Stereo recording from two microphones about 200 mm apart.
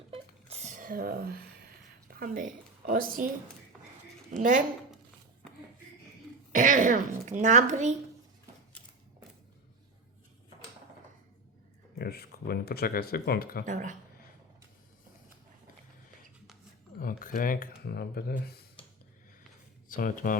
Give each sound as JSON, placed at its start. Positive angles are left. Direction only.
{"t": 0.1, "sound": "a sound", "side_deg": -30}
{"t": 2.1, "sound": "a woman's voice", "side_deg": -45}
{"t": 4.3, "sound": "speech", "side_deg": -40}
{"t": 6.5, "sound": "speech", "side_deg": -40}
{"t": 11.9, "sound": "speech", "side_deg": 50}
{"t": 13.7, "sound": "speech", "side_deg": -40}
{"t": 17.0, "sound": "speech", "side_deg": 45}
{"t": 19.9, "sound": "speech", "side_deg": 40}